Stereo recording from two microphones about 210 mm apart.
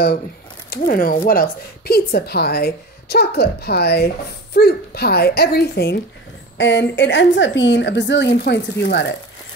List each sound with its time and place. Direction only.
0.7 s a woman's voice: 40° left (ahead or behind)